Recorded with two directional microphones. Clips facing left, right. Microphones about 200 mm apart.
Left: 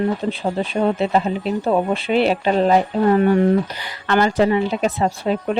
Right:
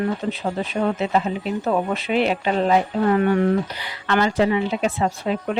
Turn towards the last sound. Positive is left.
turn(degrees=40)  # may be behind; listen again after turning